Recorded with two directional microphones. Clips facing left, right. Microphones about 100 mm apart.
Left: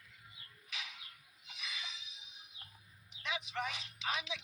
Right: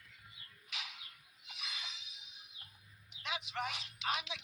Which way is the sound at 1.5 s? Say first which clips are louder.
Left 1 dB; 35° right (ahead or behind).